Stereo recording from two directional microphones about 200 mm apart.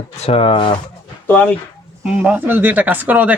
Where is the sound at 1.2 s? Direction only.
10° left (ahead or behind).